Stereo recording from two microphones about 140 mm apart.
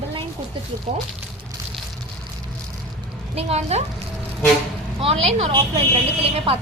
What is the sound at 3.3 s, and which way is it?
Speech, 50° right (ahead or behind).